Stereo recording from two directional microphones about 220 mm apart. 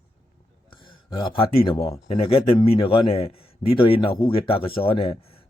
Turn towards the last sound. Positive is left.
turn(degrees=25)  # may be behind; listen again after turning